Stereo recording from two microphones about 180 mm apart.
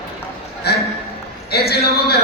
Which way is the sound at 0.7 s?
65° left (ahead or behind).